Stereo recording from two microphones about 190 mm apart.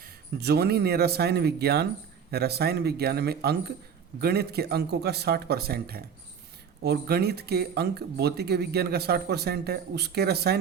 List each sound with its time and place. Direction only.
0.0 s speech: 60° right (ahead or behind)